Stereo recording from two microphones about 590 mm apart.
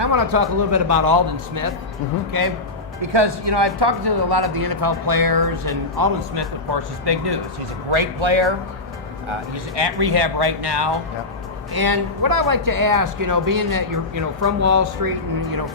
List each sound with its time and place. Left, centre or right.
0.0 s speech: right
3.0 s speech: right